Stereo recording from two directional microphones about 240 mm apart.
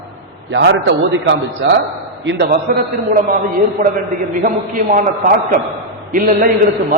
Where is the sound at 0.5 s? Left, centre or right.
Right.